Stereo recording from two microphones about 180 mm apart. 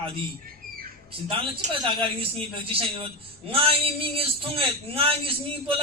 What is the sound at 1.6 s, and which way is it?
Speech, 40° right (ahead or behind).